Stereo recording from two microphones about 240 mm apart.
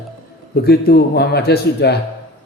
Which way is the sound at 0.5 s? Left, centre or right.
Left.